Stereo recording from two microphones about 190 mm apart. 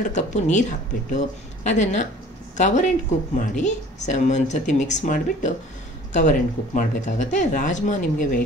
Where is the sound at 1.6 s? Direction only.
40° left (ahead or behind).